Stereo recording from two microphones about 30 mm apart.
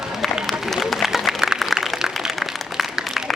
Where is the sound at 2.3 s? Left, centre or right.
Centre.